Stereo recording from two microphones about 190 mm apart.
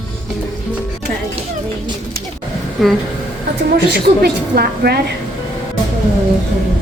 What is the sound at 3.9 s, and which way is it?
A woman's voice, 55° right (ahead or behind).